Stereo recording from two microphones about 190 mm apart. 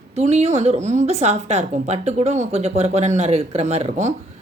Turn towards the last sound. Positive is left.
turn(degrees=-35)  # may be behind; listen again after turning